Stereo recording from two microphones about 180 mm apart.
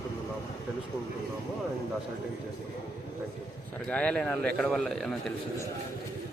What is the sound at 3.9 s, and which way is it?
A man's voice, 5° left (ahead or behind).